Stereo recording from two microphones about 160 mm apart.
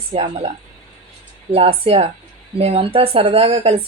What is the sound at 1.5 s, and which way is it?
Speech, 40° right (ahead or behind).